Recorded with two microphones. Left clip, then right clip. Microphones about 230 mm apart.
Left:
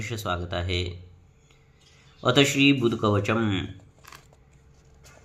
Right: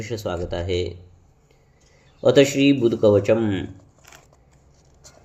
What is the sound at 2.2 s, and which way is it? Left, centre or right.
Speech, centre.